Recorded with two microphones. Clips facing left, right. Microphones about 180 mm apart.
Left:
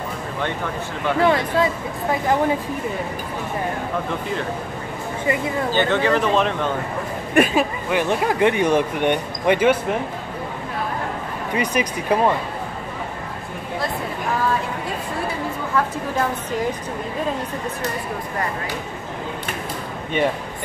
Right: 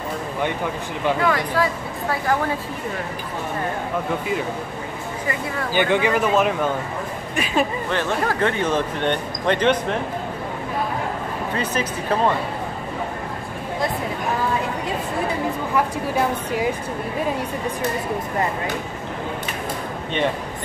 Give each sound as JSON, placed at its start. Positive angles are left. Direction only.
{"t": 1.2, "sound": "speech", "side_deg": 25}
{"t": 5.2, "sound": "speech", "side_deg": 20}
{"t": 5.7, "sound": "speech", "side_deg": -15}
{"t": 7.5, "sound": "speech", "side_deg": 10}
{"t": 11.5, "sound": "speech", "side_deg": 15}
{"t": 15.7, "sound": "speech", "side_deg": -10}